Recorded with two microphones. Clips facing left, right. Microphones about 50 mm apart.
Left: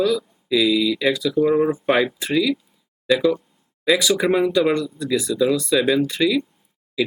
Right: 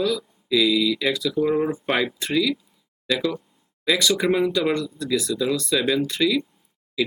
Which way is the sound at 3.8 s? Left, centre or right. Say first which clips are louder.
Left 3 dB; centre.